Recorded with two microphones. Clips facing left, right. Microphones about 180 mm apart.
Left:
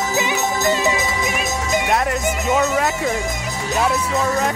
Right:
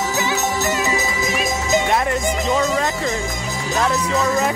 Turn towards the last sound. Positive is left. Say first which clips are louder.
# left 1 dB
turn(degrees=5)  # may be behind; listen again after turning